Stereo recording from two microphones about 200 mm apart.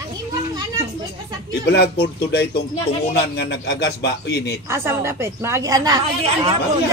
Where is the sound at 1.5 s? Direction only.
55° left (ahead or behind).